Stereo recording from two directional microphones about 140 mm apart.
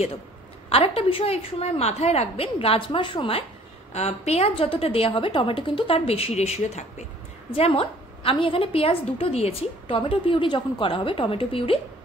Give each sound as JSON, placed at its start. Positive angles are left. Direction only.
{"t": 0.7, "sound": "a woman's voice", "side_deg": 45}
{"t": 7.5, "sound": "a woman's voice", "side_deg": 40}